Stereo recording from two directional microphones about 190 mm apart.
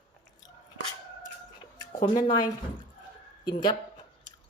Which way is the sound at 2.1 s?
20° left (ahead or behind).